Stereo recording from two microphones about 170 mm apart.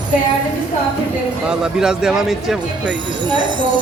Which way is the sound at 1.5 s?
5° right (ahead or behind).